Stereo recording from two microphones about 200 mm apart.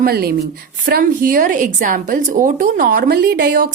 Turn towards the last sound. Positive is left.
turn(degrees=-45)  # may be behind; listen again after turning